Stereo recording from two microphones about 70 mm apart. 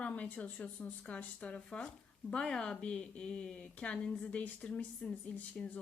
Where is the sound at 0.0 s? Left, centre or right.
Centre.